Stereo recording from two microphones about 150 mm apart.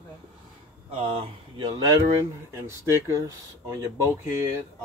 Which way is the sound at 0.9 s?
35° right (ahead or behind).